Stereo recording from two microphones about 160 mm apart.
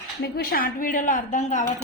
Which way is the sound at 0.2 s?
75° left (ahead or behind).